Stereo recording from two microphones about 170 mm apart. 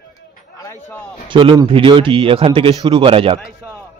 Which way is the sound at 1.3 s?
25° right (ahead or behind).